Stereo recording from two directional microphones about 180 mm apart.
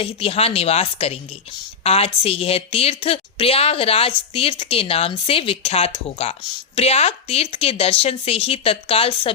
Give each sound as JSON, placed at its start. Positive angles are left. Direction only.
{"t": 0.0, "sound": "speech", "side_deg": 30}